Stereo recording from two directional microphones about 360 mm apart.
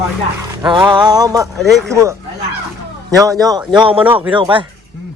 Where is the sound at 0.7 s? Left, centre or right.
Centre.